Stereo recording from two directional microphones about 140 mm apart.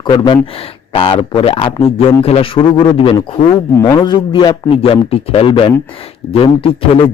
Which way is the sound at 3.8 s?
30° left (ahead or behind).